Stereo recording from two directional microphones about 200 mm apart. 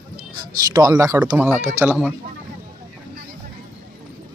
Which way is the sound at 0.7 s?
15° right (ahead or behind).